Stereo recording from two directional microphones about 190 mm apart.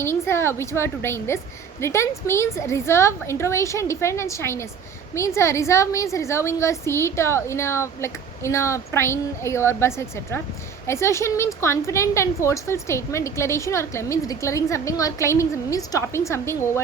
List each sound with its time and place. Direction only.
0.0 s a woman's voice: 15° left (ahead or behind)